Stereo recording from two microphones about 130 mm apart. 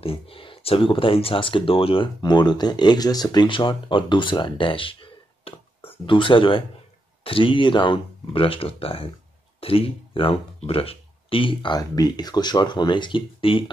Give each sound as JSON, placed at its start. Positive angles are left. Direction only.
{"t": 0.0, "sound": "speech", "side_deg": 45}